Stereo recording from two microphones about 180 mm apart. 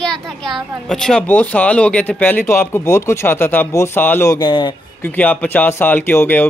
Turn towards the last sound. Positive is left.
turn(degrees=10)  # may be behind; listen again after turning